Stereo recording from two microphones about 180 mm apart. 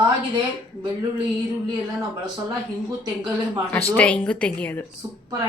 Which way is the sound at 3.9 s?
10° left (ahead or behind).